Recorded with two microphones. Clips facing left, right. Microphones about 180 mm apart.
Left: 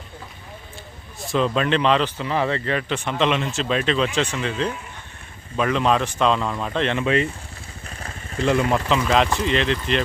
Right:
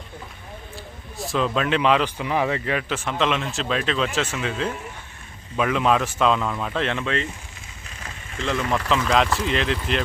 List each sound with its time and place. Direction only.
1.2 s speech: centre (ahead or behind)
7.0 s speech: 10° left (ahead or behind)
7.9 s vehicle: 35° left (ahead or behind)
8.5 s speech: 25° left (ahead or behind)
9.0 s speech: centre (ahead or behind)